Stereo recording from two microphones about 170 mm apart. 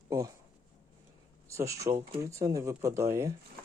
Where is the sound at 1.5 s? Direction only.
20° right (ahead or behind).